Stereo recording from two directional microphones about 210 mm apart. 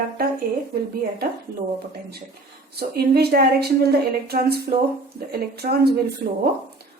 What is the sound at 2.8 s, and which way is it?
Speech, 50° right (ahead or behind).